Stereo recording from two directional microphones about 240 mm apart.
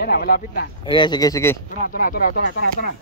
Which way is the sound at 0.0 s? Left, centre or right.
Left.